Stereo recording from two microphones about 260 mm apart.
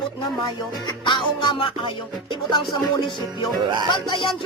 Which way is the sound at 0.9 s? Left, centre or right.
Centre.